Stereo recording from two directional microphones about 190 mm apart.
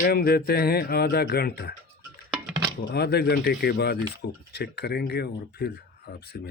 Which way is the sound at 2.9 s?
60° left (ahead or behind).